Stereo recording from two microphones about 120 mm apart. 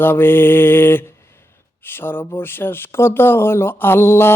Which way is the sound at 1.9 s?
20° left (ahead or behind).